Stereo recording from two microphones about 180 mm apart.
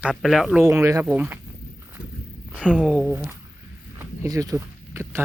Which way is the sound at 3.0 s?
10° right (ahead or behind).